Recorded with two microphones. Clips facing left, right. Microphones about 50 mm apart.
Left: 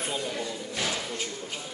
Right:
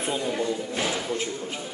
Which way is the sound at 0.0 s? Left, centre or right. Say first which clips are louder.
Right 5 dB; centre.